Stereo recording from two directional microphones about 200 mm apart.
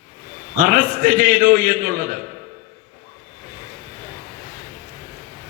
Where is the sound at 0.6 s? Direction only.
45° right (ahead or behind).